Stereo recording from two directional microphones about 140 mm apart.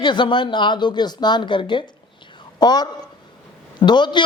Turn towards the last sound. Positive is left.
turn(degrees=35)  # may be behind; listen again after turning